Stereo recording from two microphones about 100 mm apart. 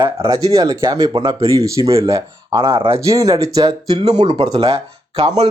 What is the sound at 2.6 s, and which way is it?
Speech, 60° right (ahead or behind).